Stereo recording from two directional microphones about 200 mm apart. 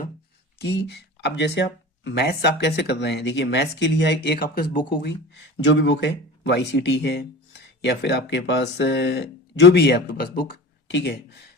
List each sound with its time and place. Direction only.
0.6 s speech: 55° left (ahead or behind)
5.3 s speech: 65° left (ahead or behind)